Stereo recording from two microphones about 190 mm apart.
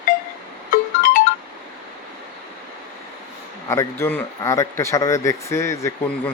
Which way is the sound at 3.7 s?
15° left (ahead or behind).